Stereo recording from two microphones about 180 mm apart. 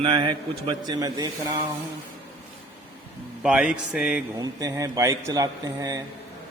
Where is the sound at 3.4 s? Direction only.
5° right (ahead or behind).